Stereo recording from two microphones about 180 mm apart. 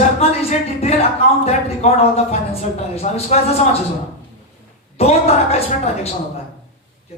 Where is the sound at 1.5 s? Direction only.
35° left (ahead or behind).